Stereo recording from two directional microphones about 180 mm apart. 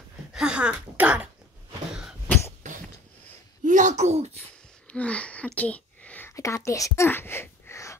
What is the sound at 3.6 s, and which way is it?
Speech, 45° right (ahead or behind).